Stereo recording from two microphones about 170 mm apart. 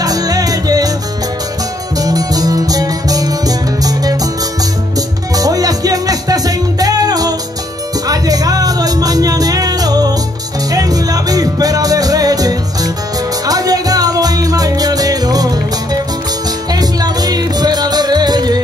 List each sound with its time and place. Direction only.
0.0 s music: 20° right (ahead or behind)
2.0 s music: 20° right (ahead or behind)
5.3 s music: 20° right (ahead or behind)